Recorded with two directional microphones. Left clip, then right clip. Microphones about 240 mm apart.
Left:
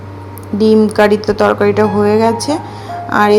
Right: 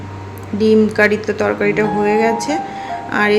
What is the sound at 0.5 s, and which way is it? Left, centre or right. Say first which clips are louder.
A woman's voice: left 3 dB; centre.